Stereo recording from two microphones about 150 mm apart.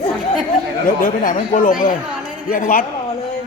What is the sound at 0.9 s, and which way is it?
Speech, 65° left (ahead or behind).